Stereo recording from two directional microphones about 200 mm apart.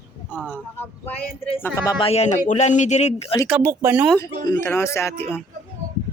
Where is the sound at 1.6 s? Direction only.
10° left (ahead or behind).